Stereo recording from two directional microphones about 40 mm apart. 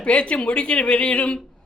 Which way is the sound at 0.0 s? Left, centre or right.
Left.